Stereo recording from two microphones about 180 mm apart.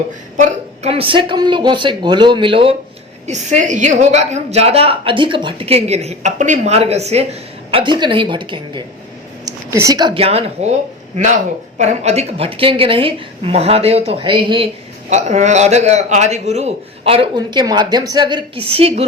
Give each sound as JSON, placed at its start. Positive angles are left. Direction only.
{"t": 0.3, "sound": "speech", "side_deg": -35}
{"t": 3.2, "sound": "a woman's voice", "side_deg": -40}
{"t": 11.8, "sound": "a woman's voice", "side_deg": -40}
{"t": 15.1, "sound": "a woman's voice", "side_deg": -40}